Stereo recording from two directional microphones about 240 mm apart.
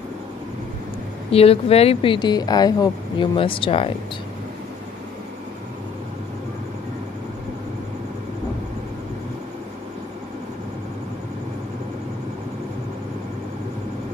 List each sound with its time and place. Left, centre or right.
1.3 s speech: left